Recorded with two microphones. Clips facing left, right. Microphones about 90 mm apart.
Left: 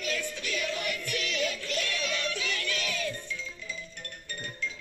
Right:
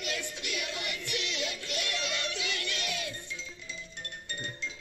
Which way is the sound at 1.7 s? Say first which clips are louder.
Left 3 dB; 15° right (ahead or behind).